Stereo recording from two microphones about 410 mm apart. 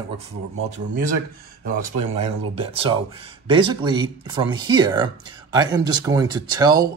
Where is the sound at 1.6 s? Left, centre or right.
Centre.